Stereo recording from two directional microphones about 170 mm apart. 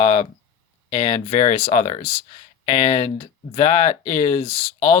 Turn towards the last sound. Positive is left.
turn(degrees=35)  # may be behind; listen again after turning